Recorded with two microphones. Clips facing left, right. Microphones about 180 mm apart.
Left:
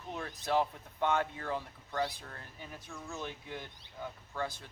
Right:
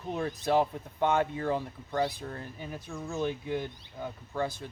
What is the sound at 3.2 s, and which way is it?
Speech, 10° right (ahead or behind).